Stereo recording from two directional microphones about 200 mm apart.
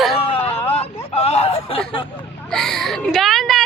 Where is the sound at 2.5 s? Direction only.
Centre (ahead or behind).